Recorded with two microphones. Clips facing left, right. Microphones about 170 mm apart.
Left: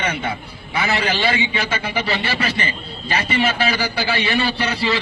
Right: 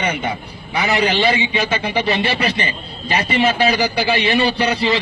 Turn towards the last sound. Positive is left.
turn(degrees=-20)  # may be behind; listen again after turning